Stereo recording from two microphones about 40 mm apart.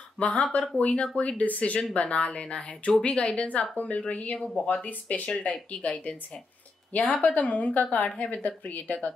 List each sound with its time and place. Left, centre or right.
0.2 s a woman's voice: left
1.4 s a woman's voice: left
3.7 s a woman's voice: left
4.1 s a woman's voice: left
4.6 s a woman's voice: left